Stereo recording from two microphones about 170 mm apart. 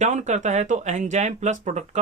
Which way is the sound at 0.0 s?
45° right (ahead or behind).